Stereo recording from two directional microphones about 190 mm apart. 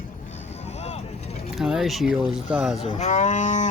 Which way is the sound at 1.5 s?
Centre (ahead or behind).